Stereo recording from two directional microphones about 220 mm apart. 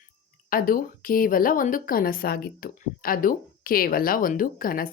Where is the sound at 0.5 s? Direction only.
40° left (ahead or behind).